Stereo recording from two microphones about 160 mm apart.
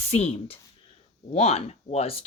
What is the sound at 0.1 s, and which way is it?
Speech, 40° left (ahead or behind).